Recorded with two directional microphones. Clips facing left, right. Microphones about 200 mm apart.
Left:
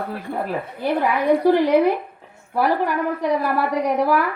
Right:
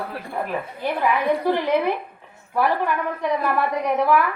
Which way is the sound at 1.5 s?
40° left (ahead or behind).